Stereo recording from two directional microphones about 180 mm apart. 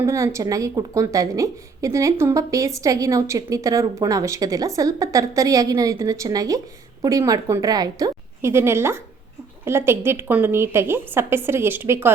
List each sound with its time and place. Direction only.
0.0 s a woman's voice: 15° right (ahead or behind)